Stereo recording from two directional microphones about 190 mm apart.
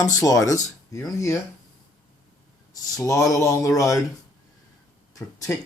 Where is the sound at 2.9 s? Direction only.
15° left (ahead or behind).